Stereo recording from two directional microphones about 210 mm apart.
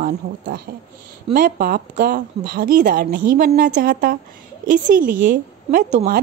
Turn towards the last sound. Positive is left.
turn(degrees=-35)  # may be behind; listen again after turning